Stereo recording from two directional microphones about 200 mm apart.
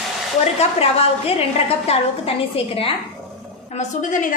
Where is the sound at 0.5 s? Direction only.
30° left (ahead or behind).